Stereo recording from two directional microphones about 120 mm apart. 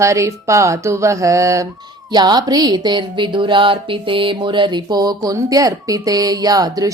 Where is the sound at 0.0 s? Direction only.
25° right (ahead or behind).